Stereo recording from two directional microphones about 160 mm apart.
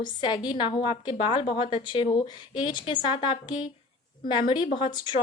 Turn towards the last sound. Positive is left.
turn(degrees=30)  # may be behind; listen again after turning